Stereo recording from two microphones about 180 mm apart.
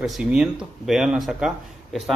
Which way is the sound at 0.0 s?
5° right (ahead or behind).